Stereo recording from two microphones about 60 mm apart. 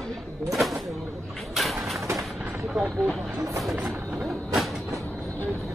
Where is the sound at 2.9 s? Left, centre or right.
Centre.